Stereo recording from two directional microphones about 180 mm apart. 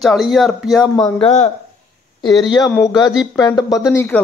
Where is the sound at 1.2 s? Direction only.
40° left (ahead or behind).